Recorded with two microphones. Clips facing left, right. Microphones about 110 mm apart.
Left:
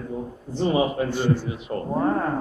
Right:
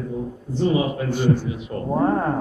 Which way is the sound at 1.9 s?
15° right (ahead or behind).